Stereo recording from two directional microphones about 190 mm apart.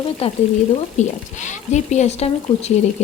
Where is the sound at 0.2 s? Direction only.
30° left (ahead or behind).